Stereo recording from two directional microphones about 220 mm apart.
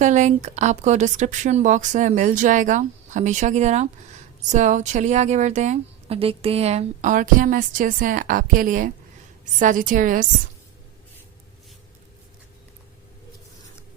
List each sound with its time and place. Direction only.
0.0 s a woman's voice: 35° right (ahead or behind)